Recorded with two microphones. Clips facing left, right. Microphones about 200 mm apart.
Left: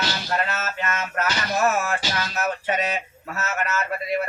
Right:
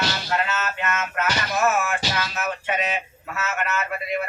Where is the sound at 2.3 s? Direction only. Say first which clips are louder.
Left 2 dB; 40° left (ahead or behind).